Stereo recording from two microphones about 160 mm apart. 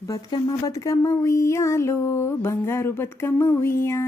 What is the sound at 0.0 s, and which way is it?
Speech, 20° left (ahead or behind).